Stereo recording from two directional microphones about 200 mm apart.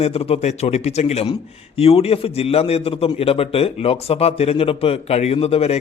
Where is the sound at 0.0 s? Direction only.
30° left (ahead or behind).